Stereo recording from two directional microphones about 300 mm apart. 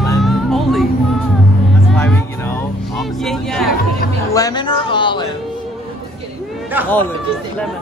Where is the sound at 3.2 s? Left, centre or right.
Centre.